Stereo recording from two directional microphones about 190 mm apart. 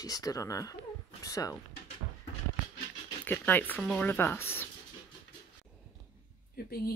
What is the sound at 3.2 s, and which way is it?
Speech, 10° left (ahead or behind).